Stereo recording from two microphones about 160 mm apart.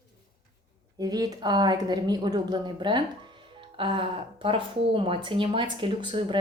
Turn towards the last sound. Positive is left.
turn(degrees=-30)  # may be behind; listen again after turning